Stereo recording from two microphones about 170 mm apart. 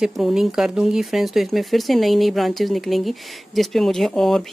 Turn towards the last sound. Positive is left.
turn(degrees=0)  # may be behind; listen again after turning